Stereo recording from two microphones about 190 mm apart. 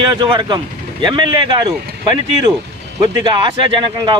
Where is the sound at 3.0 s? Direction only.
25° right (ahead or behind).